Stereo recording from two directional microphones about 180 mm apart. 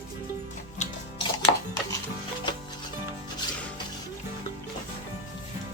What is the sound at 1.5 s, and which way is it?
Music, 20° left (ahead or behind).